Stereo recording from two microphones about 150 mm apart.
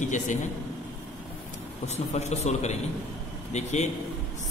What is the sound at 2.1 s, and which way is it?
A man's voice, 50° left (ahead or behind).